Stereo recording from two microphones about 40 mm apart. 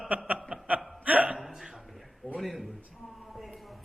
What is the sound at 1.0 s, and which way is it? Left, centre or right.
Hiccup, right.